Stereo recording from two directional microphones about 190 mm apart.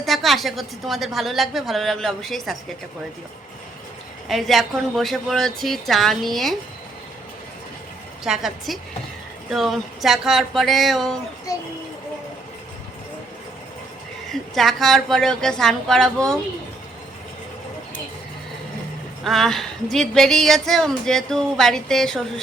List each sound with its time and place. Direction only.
0.0 s speech: centre (ahead or behind)
4.3 s speech: centre (ahead or behind)
8.2 s speech: centre (ahead or behind)
11.5 s speech: 15° left (ahead or behind)
14.3 s speech: centre (ahead or behind)
19.2 s speech: centre (ahead or behind)